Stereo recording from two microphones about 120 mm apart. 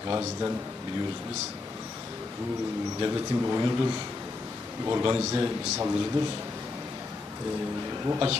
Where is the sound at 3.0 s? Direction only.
30° right (ahead or behind).